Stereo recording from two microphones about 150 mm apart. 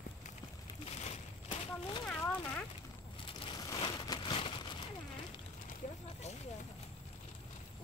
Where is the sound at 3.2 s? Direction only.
35° left (ahead or behind).